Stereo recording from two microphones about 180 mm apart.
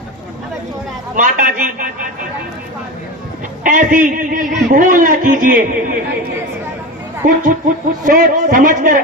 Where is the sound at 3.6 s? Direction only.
45° right (ahead or behind).